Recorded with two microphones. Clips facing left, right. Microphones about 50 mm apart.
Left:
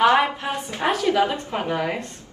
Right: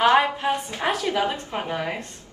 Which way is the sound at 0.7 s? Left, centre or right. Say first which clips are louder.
Left 3 dB; left.